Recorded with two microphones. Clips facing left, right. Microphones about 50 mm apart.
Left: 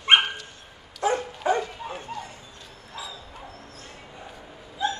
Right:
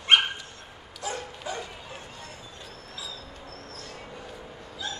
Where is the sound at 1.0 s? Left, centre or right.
Left.